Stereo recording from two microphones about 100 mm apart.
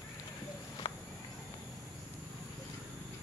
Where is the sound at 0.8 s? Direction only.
60° left (ahead or behind).